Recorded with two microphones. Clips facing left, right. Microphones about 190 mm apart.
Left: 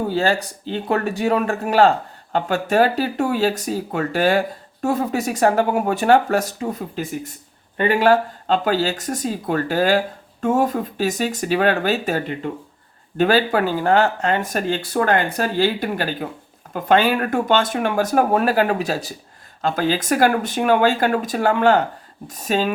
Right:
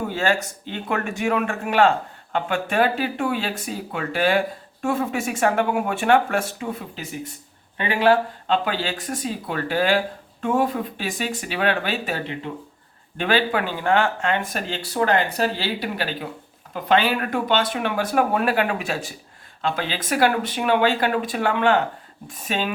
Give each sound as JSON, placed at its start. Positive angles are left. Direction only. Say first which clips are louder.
{"t": 0.1, "sound": "speech", "louder": "left 3 dB", "side_deg": 35}